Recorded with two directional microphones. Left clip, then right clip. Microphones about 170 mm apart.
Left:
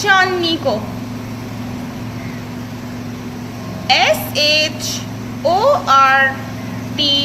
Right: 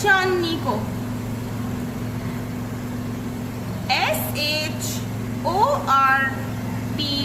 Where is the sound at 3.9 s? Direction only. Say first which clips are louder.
Left 8 dB; 45° left (ahead or behind).